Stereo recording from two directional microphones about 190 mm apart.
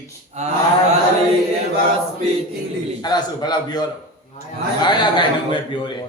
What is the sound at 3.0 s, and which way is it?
Speech, 20° left (ahead or behind).